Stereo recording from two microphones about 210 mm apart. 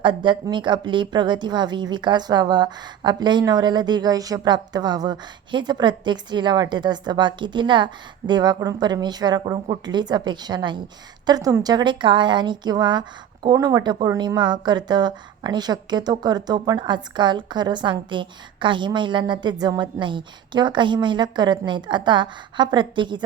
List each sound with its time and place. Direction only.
0.0 s a woman's voice: 25° right (ahead or behind)